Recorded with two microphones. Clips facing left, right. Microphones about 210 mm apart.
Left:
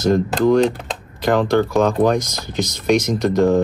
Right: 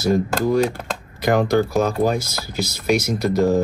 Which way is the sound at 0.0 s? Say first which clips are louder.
Left 3 dB; 10° right (ahead or behind).